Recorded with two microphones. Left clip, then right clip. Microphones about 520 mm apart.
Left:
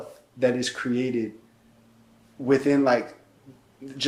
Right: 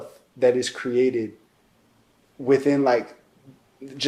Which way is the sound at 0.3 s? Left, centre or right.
Right.